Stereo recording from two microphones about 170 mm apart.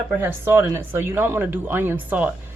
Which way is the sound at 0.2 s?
15° right (ahead or behind).